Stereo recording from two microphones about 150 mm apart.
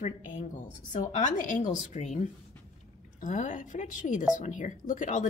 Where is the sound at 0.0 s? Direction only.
55° left (ahead or behind).